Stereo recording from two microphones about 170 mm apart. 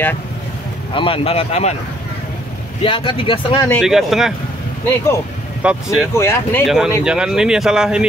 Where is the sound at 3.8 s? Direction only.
Centre (ahead or behind).